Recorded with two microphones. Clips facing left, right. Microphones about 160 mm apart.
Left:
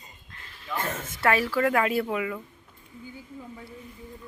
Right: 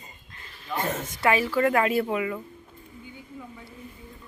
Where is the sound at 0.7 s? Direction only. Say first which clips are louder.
Right 3 dB; 15° right (ahead or behind).